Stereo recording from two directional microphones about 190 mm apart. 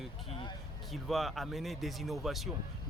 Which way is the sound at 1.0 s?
Centre (ahead or behind).